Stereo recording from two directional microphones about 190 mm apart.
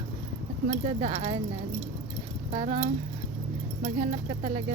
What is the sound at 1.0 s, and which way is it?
Speech, 30° right (ahead or behind).